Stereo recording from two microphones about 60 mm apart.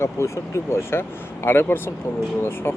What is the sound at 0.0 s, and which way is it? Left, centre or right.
Speech, left.